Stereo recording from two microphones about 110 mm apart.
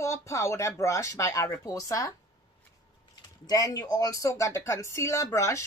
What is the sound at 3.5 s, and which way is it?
A woman's voice, 30° left (ahead or behind).